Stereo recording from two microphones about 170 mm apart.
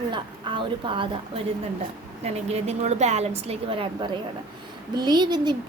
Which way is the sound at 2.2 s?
40° right (ahead or behind).